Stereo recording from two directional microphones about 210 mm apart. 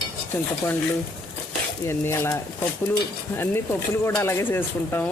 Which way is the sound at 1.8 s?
10° left (ahead or behind).